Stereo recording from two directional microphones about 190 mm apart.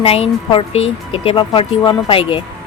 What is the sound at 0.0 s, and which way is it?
Speech, 30° left (ahead or behind).